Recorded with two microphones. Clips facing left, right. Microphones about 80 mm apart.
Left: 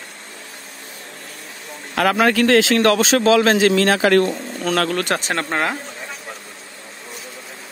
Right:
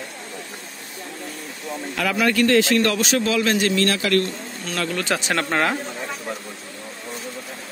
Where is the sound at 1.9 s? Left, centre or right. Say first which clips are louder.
Left 5 dB; left.